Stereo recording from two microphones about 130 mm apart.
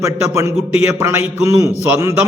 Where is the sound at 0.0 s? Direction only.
25° right (ahead or behind).